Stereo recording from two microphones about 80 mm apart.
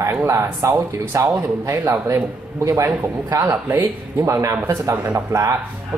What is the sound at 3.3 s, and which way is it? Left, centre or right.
Speech, right.